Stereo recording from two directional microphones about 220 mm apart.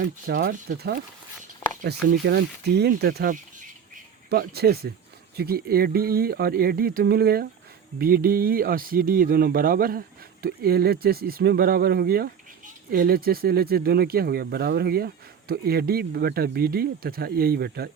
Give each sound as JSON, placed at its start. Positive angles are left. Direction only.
{"t": 0.0, "sound": "speech", "side_deg": -40}